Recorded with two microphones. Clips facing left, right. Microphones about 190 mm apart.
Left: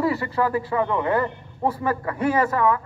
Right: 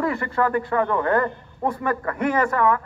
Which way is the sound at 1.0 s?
5° left (ahead or behind).